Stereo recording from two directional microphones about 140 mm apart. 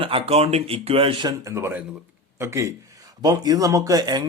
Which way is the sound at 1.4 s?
20° right (ahead or behind).